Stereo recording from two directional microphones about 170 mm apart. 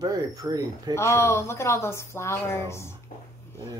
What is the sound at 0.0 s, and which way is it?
Speech, 20° right (ahead or behind).